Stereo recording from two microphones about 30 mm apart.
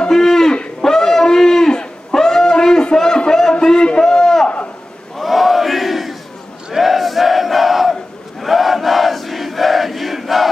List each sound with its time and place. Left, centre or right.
0.1 s livestock: centre
0.8 s a sound: centre
5.1 s battle cry: centre